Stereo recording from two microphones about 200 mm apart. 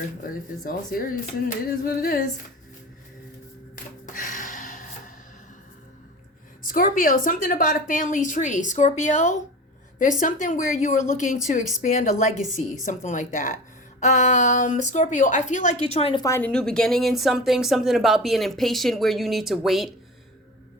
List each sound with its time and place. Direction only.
0.2 s speech: 45° left (ahead or behind)
4.0 s music: 40° left (ahead or behind)
6.6 s a woman's voice: 45° left (ahead or behind)
16.2 s a woman's voice: 10° left (ahead or behind)